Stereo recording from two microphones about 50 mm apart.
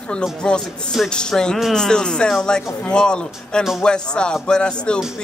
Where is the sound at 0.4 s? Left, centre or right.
Centre.